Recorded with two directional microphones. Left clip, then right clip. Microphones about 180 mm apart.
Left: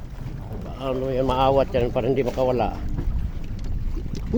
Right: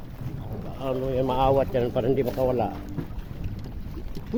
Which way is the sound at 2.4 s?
20° left (ahead or behind).